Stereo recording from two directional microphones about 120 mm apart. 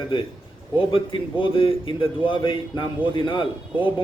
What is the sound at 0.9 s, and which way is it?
A man's voice, 45° left (ahead or behind).